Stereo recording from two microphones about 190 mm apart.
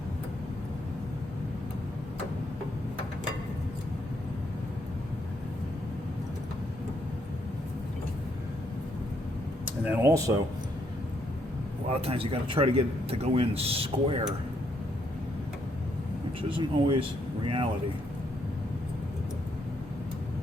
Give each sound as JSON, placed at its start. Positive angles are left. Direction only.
{"t": 9.9, "sound": "speech", "side_deg": -10}
{"t": 11.9, "sound": "a man's voice", "side_deg": -30}
{"t": 16.4, "sound": "speech", "side_deg": -25}